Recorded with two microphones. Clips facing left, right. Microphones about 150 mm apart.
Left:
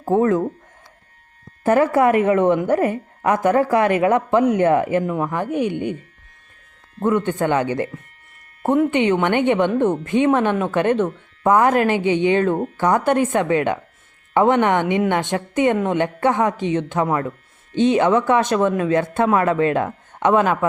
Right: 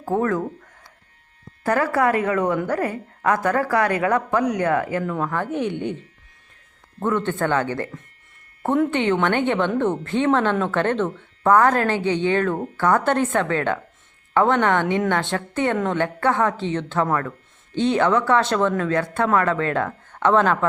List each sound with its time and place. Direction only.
0.0 s speech: 20° left (ahead or behind)
1.6 s a woman's voice: 20° left (ahead or behind)
7.0 s speech: 15° left (ahead or behind)